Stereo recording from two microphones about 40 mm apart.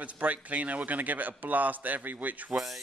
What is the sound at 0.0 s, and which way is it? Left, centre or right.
A man's voice, right.